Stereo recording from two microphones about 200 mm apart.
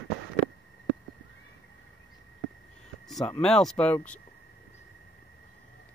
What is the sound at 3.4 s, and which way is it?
Speech, centre (ahead or behind).